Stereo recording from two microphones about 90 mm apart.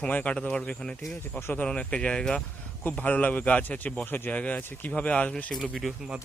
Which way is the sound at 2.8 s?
20° left (ahead or behind).